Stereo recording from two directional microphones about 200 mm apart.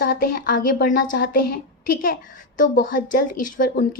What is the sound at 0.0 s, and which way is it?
A woman's voice, 45° left (ahead or behind).